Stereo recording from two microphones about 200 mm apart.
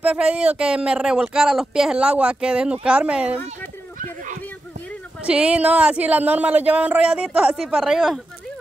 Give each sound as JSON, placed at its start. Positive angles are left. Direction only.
{"t": 0.0, "sound": "speech", "side_deg": -5}
{"t": 4.0, "sound": "a sound", "side_deg": -40}
{"t": 5.2, "sound": "speech", "side_deg": -5}